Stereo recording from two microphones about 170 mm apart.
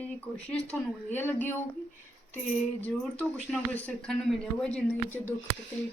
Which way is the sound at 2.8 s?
10° left (ahead or behind).